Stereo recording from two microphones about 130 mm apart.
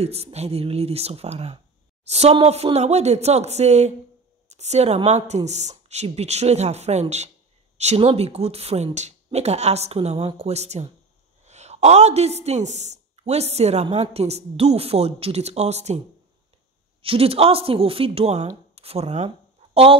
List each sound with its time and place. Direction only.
0.0 s a woman's voice: 55° right (ahead or behind)
17.0 s speech: 45° right (ahead or behind)